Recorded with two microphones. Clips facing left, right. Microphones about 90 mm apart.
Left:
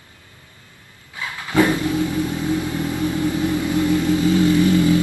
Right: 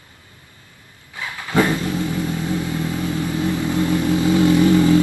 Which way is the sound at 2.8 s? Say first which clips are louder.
Left 2 dB; 20° left (ahead or behind).